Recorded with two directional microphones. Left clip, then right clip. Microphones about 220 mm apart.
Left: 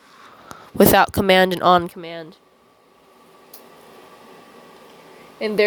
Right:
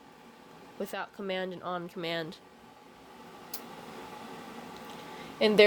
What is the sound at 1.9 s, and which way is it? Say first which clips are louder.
Speech: left 2 dB; 15° left (ahead or behind).